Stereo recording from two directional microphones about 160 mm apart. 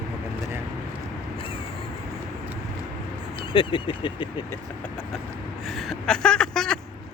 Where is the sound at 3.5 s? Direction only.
30° left (ahead or behind).